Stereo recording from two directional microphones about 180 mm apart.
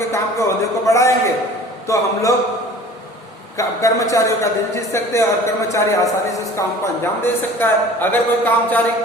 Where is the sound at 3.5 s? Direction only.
15° left (ahead or behind).